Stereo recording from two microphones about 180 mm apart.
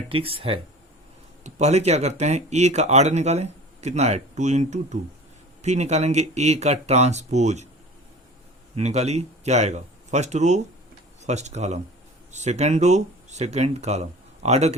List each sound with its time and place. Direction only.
0.1 s speech: 30° right (ahead or behind)
8.7 s a man's voice: 35° right (ahead or behind)